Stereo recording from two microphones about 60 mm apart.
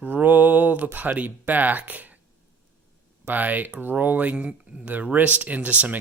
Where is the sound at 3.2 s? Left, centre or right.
Right.